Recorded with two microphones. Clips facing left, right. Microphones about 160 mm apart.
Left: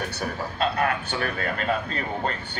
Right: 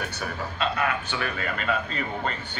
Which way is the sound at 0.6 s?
45° left (ahead or behind).